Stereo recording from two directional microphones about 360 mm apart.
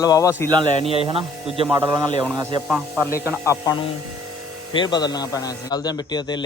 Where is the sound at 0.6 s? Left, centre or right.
Centre.